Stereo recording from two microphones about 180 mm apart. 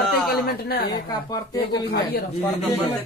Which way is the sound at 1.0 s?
20° left (ahead or behind).